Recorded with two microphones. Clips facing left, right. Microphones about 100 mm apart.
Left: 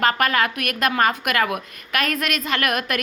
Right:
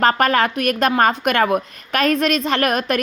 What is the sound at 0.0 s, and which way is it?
A woman's voice, 35° right (ahead or behind).